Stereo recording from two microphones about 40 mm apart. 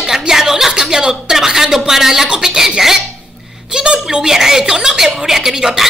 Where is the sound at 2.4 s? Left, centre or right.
Centre.